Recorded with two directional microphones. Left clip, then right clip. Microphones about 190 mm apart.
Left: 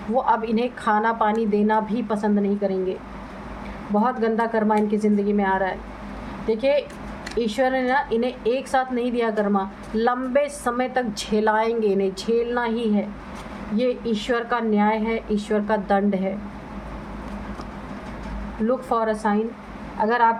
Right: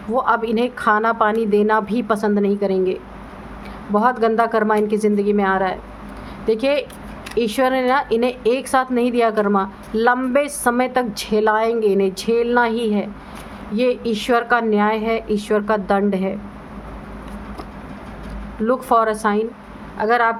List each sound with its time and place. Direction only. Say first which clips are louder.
0.2 s a woman's voice: right 3 dB; 30° right (ahead or behind)
3.9 s a woman's voice: right 5 dB; 40° right (ahead or behind)
18.7 s a woman's voice: right 6 dB; 40° right (ahead or behind)